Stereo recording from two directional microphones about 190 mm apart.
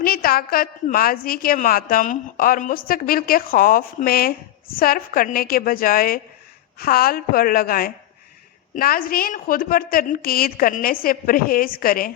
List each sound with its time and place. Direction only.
0.0 s a woman's voice: 50° left (ahead or behind)